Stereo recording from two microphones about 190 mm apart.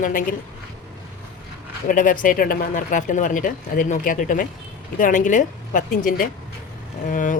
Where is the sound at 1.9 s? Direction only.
45° left (ahead or behind).